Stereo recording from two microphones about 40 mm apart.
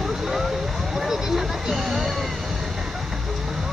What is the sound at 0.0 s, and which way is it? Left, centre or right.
Vehicle, centre.